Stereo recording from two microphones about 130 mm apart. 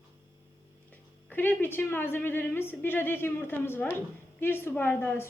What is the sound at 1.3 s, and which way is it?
A woman's voice, 15° left (ahead or behind).